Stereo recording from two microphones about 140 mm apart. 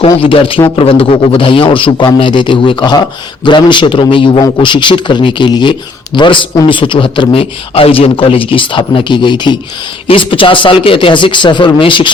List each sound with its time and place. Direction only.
0.2 s a man's voice: 40° left (ahead or behind)